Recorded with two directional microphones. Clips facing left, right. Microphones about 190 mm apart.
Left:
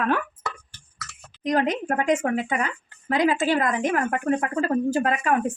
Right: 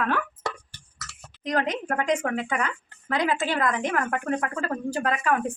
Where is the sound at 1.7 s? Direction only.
25° left (ahead or behind).